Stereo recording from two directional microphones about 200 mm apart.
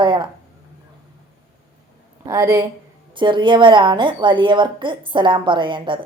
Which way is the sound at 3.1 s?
25° right (ahead or behind).